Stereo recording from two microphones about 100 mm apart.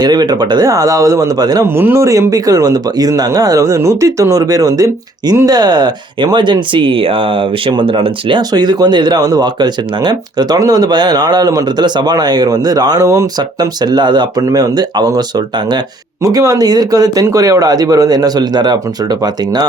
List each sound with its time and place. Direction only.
0.0 s speech: 45° right (ahead or behind)
1.6 s speech: 25° right (ahead or behind)
13.8 s speech: 45° right (ahead or behind)
16.2 s speech: 35° right (ahead or behind)